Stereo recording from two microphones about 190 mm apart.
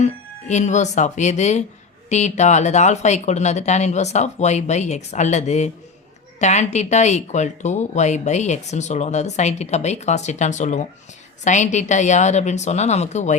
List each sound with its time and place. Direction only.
0.0 s speech: 40° left (ahead or behind)